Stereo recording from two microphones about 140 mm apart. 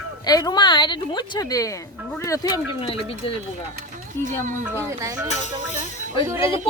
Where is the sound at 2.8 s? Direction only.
40° left (ahead or behind).